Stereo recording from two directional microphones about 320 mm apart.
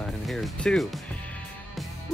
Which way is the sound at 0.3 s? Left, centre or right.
Centre.